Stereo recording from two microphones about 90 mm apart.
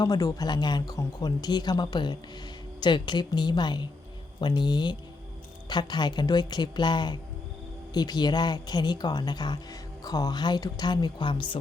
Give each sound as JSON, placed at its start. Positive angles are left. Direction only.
{"t": 0.0, "sound": "speech", "side_deg": 40}